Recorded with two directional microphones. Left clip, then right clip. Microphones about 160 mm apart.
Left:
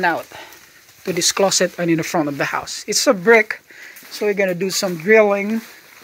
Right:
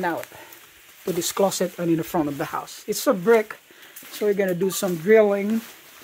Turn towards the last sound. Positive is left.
turn(degrees=0)  # may be behind; listen again after turning